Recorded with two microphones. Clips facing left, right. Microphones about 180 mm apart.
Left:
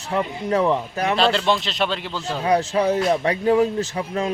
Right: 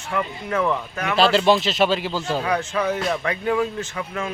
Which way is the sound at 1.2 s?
5° right (ahead or behind).